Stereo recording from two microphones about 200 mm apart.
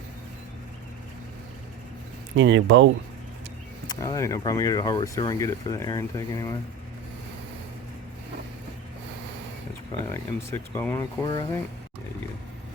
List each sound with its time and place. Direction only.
2.3 s speech: 65° right (ahead or behind)
3.8 s speech: 15° left (ahead or behind)
10.1 s speech: 10° left (ahead or behind)